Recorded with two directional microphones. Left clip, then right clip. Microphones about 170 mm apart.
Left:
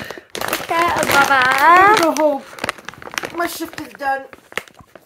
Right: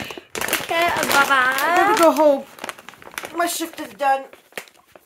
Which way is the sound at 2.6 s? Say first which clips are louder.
Left 8 dB; 65° left (ahead or behind).